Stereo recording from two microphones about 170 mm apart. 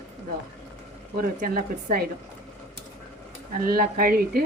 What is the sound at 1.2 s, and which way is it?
Speech, 60° right (ahead or behind).